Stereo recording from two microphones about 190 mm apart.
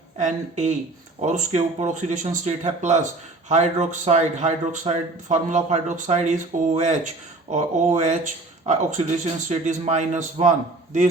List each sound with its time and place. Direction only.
0.2 s a man's voice: 35° right (ahead or behind)